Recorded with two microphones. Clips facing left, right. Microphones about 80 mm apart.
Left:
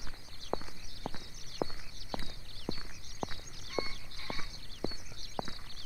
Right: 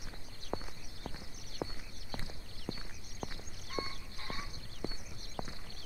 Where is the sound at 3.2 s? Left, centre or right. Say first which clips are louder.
Left 4 dB; centre.